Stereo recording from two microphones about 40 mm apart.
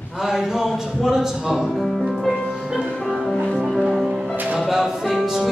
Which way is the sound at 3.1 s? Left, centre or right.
Centre.